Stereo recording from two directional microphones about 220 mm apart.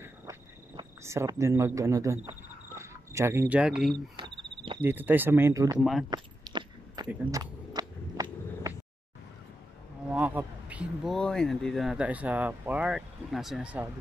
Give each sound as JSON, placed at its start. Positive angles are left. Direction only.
{"t": 0.0, "sound": "cricket", "side_deg": -15}
{"t": 2.8, "sound": "speech", "side_deg": -15}
{"t": 6.0, "sound": "keys jangling", "side_deg": -20}
{"t": 7.1, "sound": "a sound", "side_deg": -15}
{"t": 10.1, "sound": "speech", "side_deg": -10}